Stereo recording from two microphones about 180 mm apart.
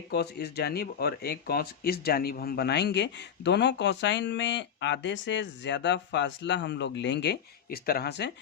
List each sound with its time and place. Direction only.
0.1 s speech: 65° left (ahead or behind)